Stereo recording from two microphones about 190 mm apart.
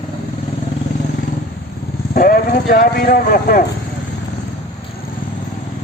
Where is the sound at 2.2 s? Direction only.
50° left (ahead or behind).